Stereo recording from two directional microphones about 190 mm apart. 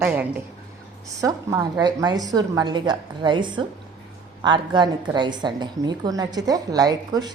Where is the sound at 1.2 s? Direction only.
20° right (ahead or behind).